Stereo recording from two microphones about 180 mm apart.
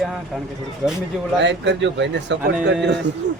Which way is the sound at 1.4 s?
80° right.